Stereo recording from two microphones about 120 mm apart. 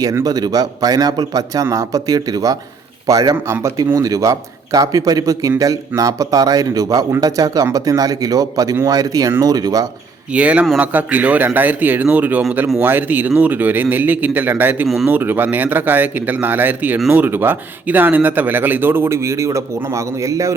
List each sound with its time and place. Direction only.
0.0 s a man's voice: 30° right (ahead or behind)
10.3 s speech: 10° right (ahead or behind)